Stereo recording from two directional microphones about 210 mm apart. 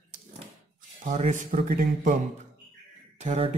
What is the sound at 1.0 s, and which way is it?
Speech, 35° right (ahead or behind).